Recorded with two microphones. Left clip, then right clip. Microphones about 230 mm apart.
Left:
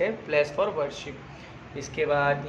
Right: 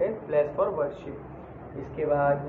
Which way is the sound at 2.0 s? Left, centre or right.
Left.